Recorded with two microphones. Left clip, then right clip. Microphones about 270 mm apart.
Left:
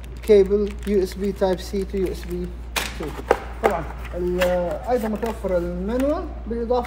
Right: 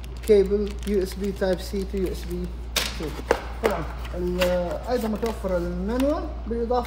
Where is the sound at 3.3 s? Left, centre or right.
Centre.